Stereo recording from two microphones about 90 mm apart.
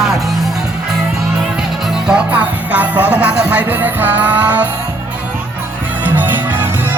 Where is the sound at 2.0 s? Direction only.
15° right (ahead or behind).